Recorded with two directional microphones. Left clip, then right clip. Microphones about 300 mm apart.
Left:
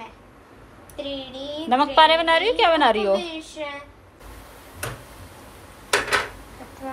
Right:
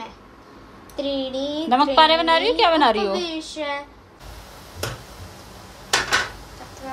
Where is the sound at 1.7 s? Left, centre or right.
Centre.